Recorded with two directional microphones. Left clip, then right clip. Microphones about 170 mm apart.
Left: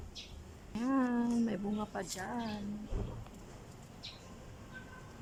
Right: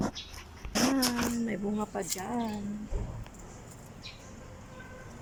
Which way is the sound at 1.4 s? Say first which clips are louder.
Right 4 dB; centre (ahead or behind).